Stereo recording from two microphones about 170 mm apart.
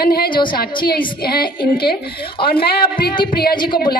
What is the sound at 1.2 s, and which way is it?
Speech, 65° left (ahead or behind).